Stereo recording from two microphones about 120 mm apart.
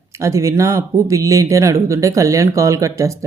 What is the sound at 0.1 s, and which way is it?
Speech, 25° right (ahead or behind).